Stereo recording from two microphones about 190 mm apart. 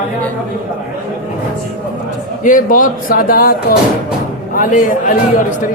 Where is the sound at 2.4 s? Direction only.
45° left (ahead or behind).